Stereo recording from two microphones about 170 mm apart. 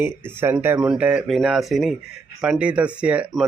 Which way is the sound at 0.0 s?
15° right (ahead or behind).